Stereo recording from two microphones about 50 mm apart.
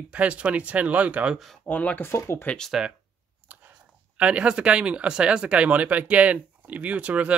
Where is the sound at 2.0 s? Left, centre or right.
Left.